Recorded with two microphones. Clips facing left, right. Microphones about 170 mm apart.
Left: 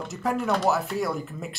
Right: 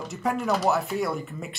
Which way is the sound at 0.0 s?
Centre (ahead or behind).